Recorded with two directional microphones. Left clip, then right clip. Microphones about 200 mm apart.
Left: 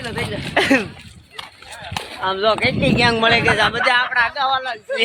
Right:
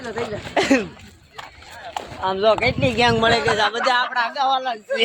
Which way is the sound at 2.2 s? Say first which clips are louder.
Even; centre (ahead or behind).